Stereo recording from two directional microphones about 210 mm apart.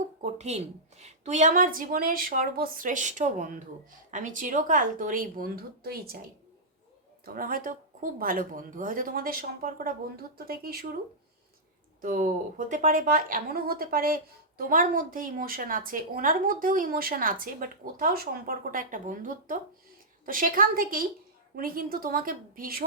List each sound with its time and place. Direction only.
0.2 s a woman's voice: 30° right (ahead or behind)
7.3 s speech: 40° right (ahead or behind)
12.0 s a woman's voice: 40° right (ahead or behind)